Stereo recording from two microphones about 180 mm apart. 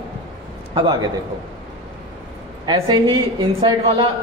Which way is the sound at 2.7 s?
25° right (ahead or behind).